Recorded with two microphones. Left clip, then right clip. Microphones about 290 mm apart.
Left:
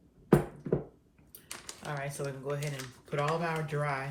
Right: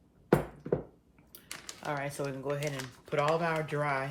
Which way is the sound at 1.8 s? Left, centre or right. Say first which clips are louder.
Right 3 dB; right.